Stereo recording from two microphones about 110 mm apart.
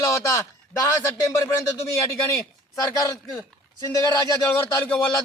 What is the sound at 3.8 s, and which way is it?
Speech, 35° left (ahead or behind).